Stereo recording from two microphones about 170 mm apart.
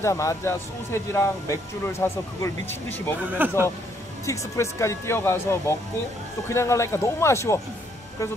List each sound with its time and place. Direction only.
0.0 s speech: 20° left (ahead or behind)
3.2 s speech: 10° right (ahead or behind)
4.3 s speech: 15° left (ahead or behind)